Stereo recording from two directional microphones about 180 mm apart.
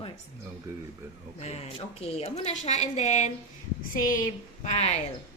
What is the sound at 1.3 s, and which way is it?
A woman's voice, 35° left (ahead or behind).